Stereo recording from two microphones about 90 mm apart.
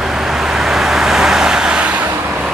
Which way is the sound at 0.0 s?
5° right (ahead or behind).